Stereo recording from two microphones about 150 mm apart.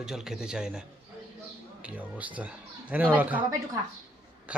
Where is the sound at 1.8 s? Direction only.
10° right (ahead or behind).